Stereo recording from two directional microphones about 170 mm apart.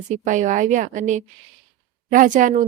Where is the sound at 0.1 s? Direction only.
45° right (ahead or behind).